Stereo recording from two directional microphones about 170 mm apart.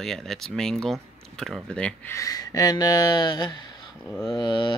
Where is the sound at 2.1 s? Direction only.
20° left (ahead or behind).